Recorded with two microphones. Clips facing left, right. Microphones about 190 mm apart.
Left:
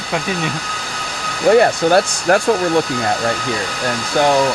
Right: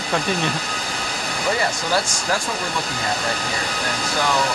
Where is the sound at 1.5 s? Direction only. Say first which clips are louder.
Left 12 dB; 60° left (ahead or behind).